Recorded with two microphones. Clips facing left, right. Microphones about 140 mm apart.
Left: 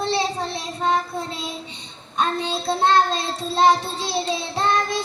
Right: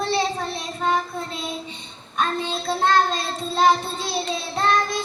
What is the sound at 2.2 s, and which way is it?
Child singing, 20° left (ahead or behind).